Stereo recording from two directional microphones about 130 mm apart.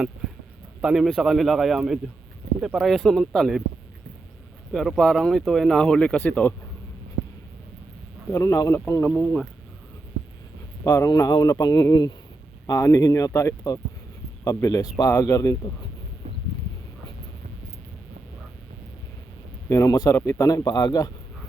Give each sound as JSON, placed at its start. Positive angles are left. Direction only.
{"t": 0.8, "sound": "speech", "side_deg": -5}
{"t": 4.7, "sound": "speech", "side_deg": 0}
{"t": 8.3, "sound": "a man's voice", "side_deg": 25}
{"t": 10.8, "sound": "a man's voice", "side_deg": 25}
{"t": 19.6, "sound": "a man's voice", "side_deg": 20}